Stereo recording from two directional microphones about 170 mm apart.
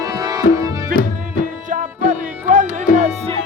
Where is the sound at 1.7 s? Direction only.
50° right (ahead or behind).